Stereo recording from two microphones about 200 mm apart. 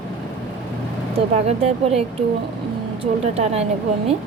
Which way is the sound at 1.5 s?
30° right (ahead or behind).